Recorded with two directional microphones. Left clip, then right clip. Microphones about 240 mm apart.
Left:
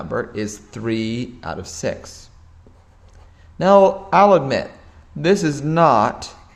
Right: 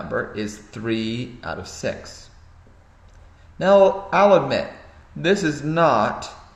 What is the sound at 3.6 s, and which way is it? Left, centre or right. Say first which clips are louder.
Speech: left 2 dB; left.